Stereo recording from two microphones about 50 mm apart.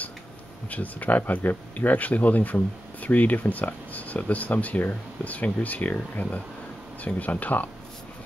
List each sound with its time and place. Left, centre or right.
0.7 s speech: left